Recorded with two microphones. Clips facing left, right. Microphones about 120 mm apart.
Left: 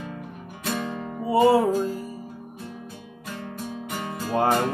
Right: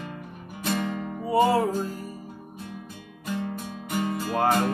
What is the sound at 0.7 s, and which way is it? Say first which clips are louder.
Music: even; 30° left (ahead or behind).